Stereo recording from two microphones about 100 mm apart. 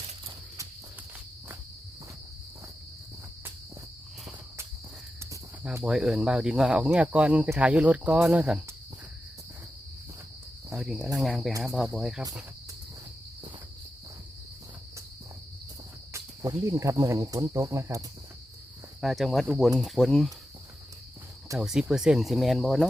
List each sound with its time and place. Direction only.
5.8 s speech: 5° right (ahead or behind)
10.8 s speech: 5° right (ahead or behind)
16.1 s cricket: 30° right (ahead or behind)
19.0 s speech: centre (ahead or behind)
21.6 s speech: 5° right (ahead or behind)